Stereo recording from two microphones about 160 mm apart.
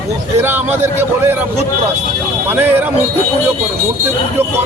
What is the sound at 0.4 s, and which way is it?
Speech, 15° right (ahead or behind).